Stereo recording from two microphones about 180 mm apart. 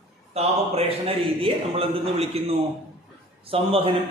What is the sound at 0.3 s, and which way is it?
A man's voice, 35° right (ahead or behind).